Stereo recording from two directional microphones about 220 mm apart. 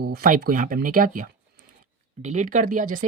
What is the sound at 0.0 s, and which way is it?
Speech, 45° right (ahead or behind).